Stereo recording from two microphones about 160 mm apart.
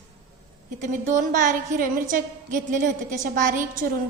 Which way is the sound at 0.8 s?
55° right (ahead or behind).